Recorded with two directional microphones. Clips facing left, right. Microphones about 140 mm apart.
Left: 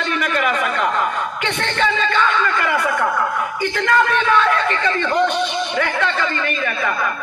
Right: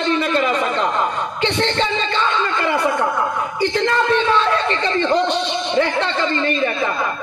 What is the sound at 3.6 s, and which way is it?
A man's voice, 25° right (ahead or behind).